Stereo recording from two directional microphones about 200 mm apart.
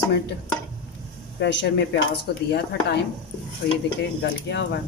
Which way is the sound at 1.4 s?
60° left (ahead or behind).